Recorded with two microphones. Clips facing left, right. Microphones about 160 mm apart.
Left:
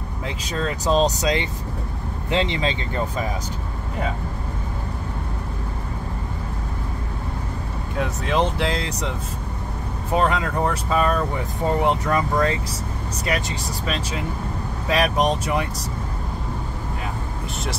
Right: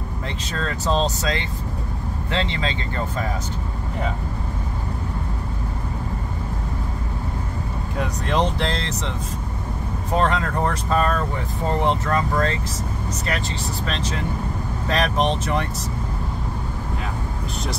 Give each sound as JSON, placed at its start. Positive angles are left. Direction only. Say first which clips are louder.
{"t": 0.5, "sound": "speech", "louder": "left 2 dB", "side_deg": 10}
{"t": 8.0, "sound": "speech", "louder": "left 1 dB", "side_deg": 0}
{"t": 10.1, "sound": "speech", "louder": "even", "side_deg": 5}
{"t": 13.8, "sound": "speech", "louder": "left 1 dB", "side_deg": 10}